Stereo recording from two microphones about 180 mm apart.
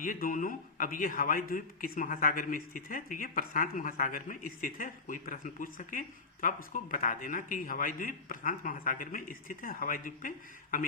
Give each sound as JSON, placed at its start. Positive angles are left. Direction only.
{"t": 0.0, "sound": "a man's voice", "side_deg": 50}